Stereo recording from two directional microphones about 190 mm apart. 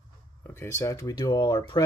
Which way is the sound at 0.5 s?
15° left (ahead or behind).